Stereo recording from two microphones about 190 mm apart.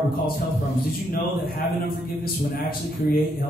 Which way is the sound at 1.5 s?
55° left (ahead or behind).